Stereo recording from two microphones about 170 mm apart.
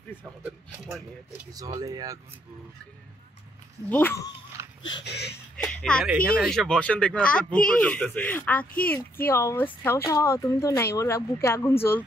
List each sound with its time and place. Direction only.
0.8 s speech: 5° right (ahead or behind)
1.8 s speech: 20° right (ahead or behind)
3.9 s speech: 15° left (ahead or behind)
4.6 s dog: 15° right (ahead or behind)
5.0 s speech: 75° left (ahead or behind)
5.6 s speech: 5° left (ahead or behind)